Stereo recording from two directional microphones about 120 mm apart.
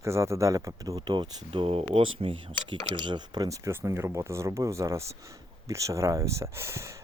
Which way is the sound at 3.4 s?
25° right (ahead or behind).